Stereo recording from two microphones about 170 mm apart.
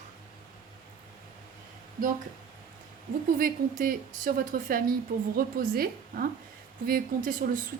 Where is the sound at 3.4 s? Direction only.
55° right (ahead or behind).